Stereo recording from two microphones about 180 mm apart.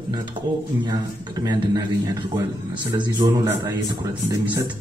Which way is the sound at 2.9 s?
25° right (ahead or behind).